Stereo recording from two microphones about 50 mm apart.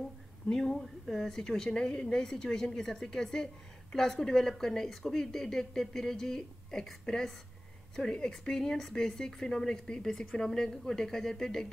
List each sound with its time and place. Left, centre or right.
0.5 s speech: centre
7.9 s speech: centre